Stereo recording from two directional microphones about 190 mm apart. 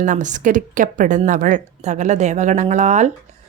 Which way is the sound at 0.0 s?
40° right (ahead or behind).